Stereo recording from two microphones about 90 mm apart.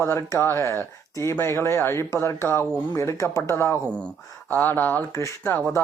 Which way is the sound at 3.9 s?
15° left (ahead or behind).